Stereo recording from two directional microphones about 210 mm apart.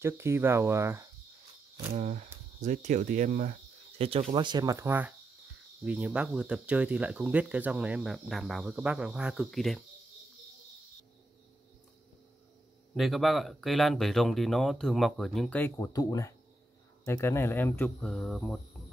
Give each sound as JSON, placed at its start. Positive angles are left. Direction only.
{"t": 0.0, "sound": "speech", "side_deg": -10}
{"t": 2.0, "sound": "speech", "side_deg": -35}
{"t": 12.9, "sound": "speech", "side_deg": 0}